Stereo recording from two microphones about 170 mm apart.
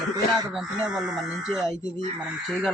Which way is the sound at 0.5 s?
5° right (ahead or behind).